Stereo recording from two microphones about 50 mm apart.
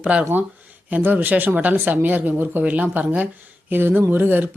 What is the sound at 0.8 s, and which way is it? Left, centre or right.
Speech, right.